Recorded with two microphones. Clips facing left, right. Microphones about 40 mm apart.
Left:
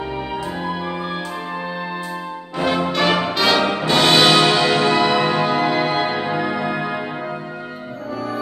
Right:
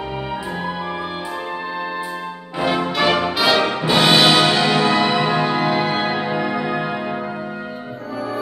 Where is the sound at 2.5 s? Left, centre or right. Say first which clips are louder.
Even; centre.